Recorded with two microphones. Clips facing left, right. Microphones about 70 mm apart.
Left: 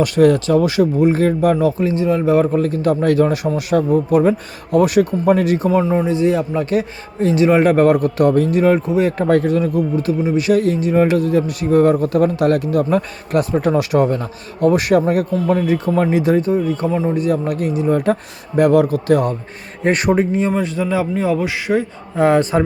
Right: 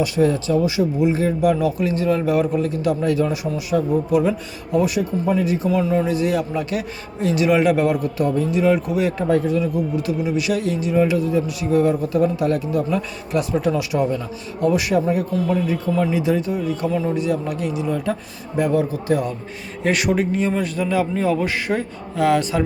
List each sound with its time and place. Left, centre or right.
0.0 s speech: left
0.9 s speech: left
4.2 s speech: left
6.1 s a man's voice: left
16.6 s speech: left
17.2 s speech: left
18.7 s speech: left
19.8 s a man's voice: left
20.6 s speech: left
21.1 s a man's voice: centre
22.1 s a man's voice: left